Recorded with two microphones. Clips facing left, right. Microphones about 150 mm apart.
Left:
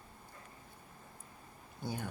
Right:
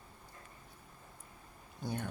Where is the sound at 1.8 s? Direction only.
Centre (ahead or behind).